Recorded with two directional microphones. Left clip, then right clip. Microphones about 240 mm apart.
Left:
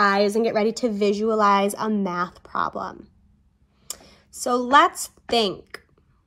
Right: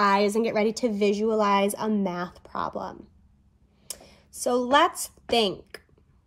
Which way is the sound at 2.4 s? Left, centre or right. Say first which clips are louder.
Left 4 dB; left.